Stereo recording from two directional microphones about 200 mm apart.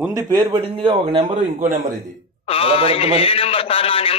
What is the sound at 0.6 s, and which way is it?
Speech, 30° right (ahead or behind).